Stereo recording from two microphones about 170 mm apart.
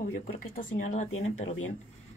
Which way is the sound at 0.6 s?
50° left (ahead or behind).